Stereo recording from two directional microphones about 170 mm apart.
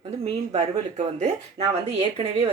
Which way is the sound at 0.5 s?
40° right (ahead or behind).